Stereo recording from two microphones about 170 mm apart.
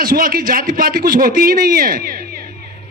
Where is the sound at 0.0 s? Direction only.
60° right (ahead or behind).